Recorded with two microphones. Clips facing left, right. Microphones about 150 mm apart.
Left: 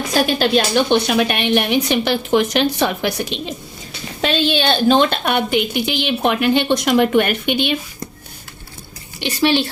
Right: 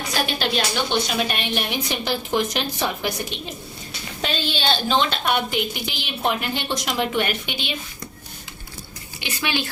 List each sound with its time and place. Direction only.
0.3 s a woman's voice: 50° left (ahead or behind); by 3.5 s 90° left
4.2 s a woman's voice: 70° left (ahead or behind)
9.3 s a woman's voice: 30° left (ahead or behind)